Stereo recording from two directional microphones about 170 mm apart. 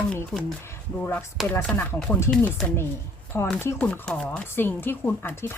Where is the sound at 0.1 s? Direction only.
10° left (ahead or behind).